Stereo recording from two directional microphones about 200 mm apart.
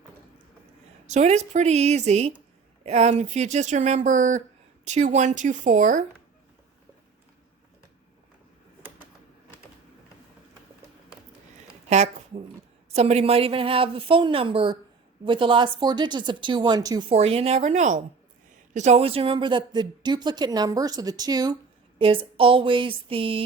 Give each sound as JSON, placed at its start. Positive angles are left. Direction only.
{"t": 1.0, "sound": "speech", "side_deg": -35}
{"t": 11.9, "sound": "a sound", "side_deg": -35}
{"t": 12.9, "sound": "speech", "side_deg": -30}